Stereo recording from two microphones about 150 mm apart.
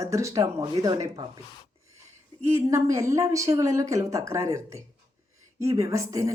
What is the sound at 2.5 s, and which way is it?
Speech, 20° right (ahead or behind).